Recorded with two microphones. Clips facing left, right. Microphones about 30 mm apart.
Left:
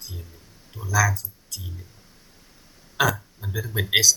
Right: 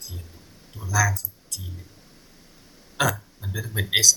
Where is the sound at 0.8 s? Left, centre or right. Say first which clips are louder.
Left 1 dB; centre.